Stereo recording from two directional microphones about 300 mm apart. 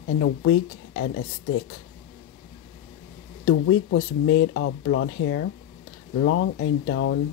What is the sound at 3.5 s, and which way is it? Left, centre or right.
Speech, left.